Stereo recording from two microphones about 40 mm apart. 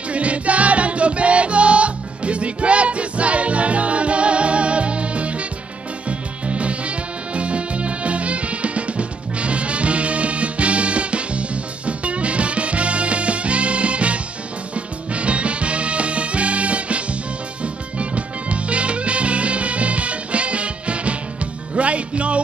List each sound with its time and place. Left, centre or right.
0.1 s music: right